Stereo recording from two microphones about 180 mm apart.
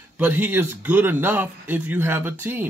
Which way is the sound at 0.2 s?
10° right (ahead or behind).